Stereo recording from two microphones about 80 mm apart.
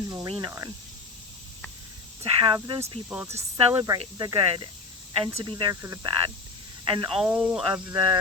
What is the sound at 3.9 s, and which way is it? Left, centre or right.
Speech, right.